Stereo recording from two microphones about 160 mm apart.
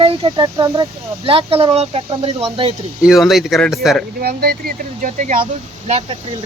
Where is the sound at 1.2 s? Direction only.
35° right (ahead or behind).